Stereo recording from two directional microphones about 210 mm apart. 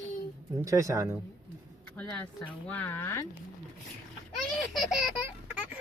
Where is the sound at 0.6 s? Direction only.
15° right (ahead or behind).